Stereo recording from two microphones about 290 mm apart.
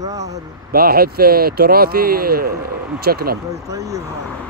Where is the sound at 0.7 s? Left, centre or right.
Right.